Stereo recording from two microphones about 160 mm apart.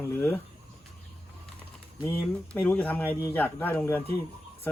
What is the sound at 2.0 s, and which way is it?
Speech, 15° left (ahead or behind).